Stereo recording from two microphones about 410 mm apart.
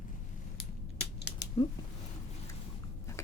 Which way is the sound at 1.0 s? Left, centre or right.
Left.